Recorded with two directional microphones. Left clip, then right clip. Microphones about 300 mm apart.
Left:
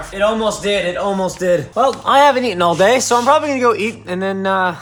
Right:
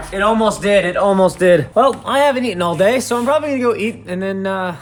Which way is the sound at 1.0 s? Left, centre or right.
Centre.